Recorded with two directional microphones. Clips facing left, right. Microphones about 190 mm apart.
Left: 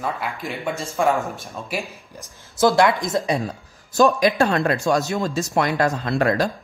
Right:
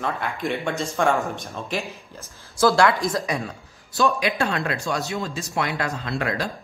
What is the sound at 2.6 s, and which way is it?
Speech, 20° left (ahead or behind).